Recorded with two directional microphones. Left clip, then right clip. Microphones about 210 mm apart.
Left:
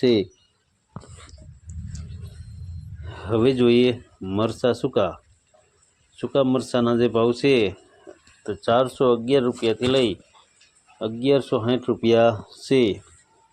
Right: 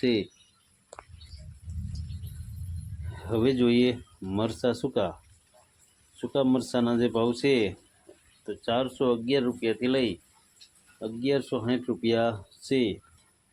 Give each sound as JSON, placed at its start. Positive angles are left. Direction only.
{"t": 0.0, "sound": "speech", "side_deg": 20}
{"t": 3.1, "sound": "speech", "side_deg": 15}
{"t": 6.1, "sound": "speech", "side_deg": 15}